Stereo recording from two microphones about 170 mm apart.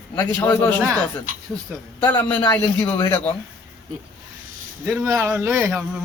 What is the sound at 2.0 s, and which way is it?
Speech, 10° left (ahead or behind).